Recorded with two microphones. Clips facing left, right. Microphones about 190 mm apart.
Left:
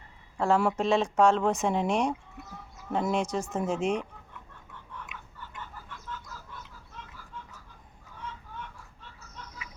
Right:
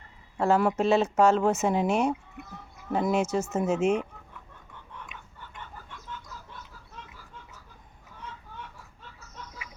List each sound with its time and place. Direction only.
0.3 s speech: centre (ahead or behind)